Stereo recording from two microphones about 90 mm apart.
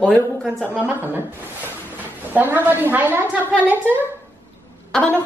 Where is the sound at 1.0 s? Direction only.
20° right (ahead or behind).